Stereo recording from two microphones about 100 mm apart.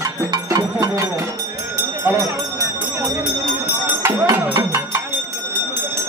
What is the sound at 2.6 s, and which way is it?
Bell, 45° right (ahead or behind).